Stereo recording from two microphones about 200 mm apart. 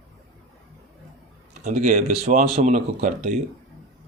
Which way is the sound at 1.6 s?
40° right (ahead or behind).